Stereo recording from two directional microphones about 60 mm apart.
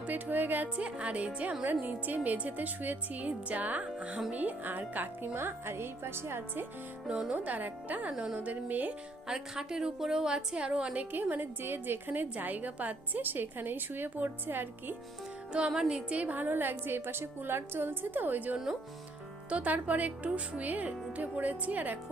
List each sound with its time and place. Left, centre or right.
0.0 s a woman's voice: right
7.1 s a woman's voice: centre
7.3 s speech: right
9.2 s a woman's voice: centre
11.1 s a woman's voice: right
15.5 s a woman's voice: centre; by 18.5 s right
18.5 s a woman's voice: centre
19.5 s speech: right